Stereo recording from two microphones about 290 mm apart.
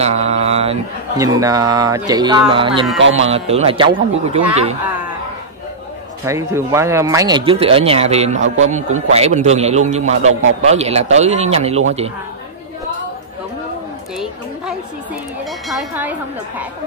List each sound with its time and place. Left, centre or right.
0.0 s speech: right
3.0 s speech: right
3.3 s speech: right
6.2 s speech: centre
15.7 s speech: centre